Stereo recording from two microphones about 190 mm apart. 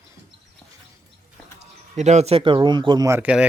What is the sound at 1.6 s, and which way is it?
Speech, 35° right (ahead or behind).